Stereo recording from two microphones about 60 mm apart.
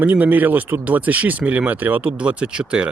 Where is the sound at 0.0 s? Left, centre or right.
Right.